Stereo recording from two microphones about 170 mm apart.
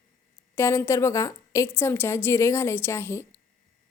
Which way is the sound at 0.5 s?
15° left (ahead or behind).